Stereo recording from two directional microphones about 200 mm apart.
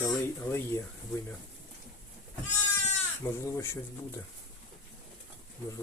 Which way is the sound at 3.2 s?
10° left (ahead or behind).